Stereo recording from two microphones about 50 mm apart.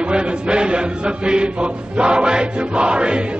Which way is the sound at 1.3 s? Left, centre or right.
Centre.